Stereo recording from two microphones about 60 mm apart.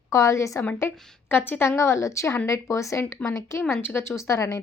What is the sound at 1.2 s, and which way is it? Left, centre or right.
Speech, left.